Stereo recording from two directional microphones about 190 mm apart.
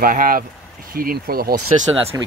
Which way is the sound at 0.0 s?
45° right (ahead or behind).